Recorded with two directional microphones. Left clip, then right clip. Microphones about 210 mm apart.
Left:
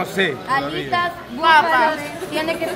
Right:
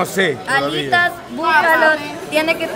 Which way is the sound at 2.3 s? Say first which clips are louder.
Right 6 dB; 35° right (ahead or behind).